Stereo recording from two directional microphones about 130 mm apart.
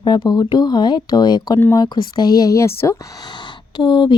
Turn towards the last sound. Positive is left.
turn(degrees=35)  # may be behind; listen again after turning